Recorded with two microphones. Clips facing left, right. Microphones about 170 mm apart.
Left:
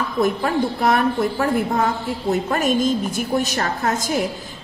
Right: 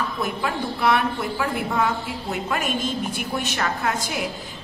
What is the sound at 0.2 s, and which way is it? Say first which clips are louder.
A woman's voice: left 11 dB; 45° left (ahead or behind).